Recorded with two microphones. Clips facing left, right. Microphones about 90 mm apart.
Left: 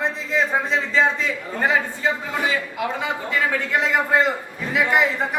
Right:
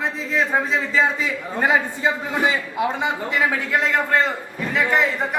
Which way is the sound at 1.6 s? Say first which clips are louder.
Right 2 dB; 15° right (ahead or behind).